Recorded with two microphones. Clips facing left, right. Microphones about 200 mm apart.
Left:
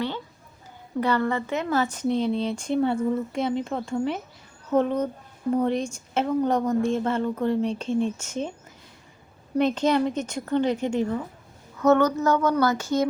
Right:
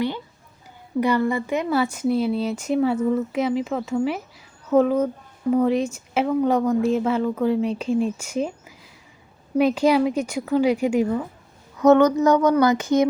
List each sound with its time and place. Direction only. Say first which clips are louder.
0.9 s speech: right 3 dB; 10° right (ahead or behind)